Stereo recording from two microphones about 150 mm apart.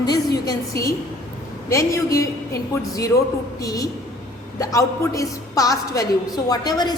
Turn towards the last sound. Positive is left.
turn(degrees=25)  # may be behind; listen again after turning